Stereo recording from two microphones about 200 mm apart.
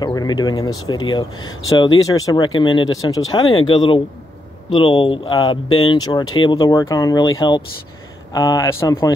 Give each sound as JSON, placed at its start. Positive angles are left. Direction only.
{"t": 0.0, "sound": "speech", "side_deg": 20}